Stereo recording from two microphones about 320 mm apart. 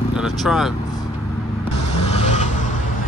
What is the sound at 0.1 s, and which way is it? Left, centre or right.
Speech, centre.